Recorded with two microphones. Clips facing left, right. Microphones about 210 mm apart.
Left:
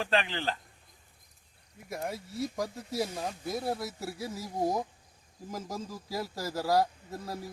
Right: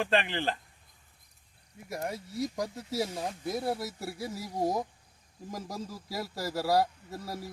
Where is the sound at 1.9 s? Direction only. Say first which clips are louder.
Right 1 dB; centre (ahead or behind).